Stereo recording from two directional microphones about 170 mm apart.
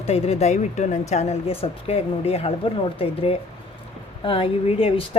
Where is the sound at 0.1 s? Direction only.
40° left (ahead or behind).